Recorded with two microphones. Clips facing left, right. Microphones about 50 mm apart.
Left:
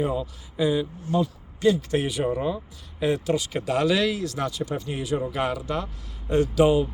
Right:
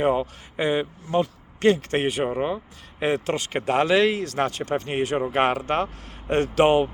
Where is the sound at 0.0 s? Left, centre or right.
Right.